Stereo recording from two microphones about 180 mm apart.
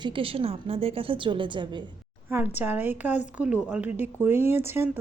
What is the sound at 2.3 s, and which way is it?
Speech, 10° right (ahead or behind).